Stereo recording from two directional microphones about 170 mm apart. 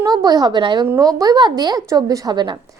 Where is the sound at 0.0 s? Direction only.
25° right (ahead or behind).